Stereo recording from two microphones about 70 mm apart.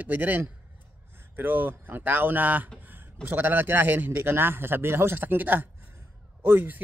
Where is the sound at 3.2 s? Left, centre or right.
Right.